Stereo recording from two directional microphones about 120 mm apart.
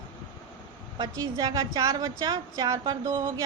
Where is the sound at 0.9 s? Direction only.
35° right (ahead or behind).